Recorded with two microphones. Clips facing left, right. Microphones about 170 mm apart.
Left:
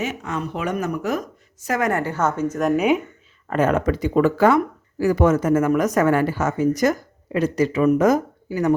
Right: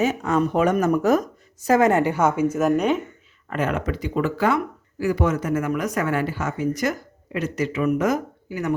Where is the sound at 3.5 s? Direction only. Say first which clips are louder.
Left 5 dB; 40° left (ahead or behind).